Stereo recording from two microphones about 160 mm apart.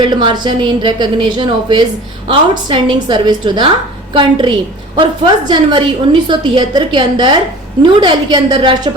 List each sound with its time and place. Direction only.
0.1 s a woman's voice: 30° right (ahead or behind)